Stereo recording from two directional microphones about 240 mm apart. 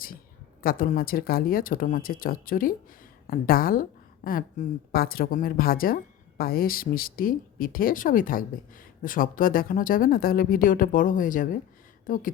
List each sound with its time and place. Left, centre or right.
0.6 s a woman's voice: left